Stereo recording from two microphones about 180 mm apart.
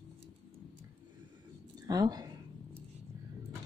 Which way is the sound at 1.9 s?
20° right (ahead or behind).